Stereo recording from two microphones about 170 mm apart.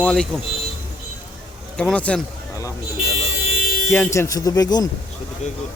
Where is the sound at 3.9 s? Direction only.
15° left (ahead or behind).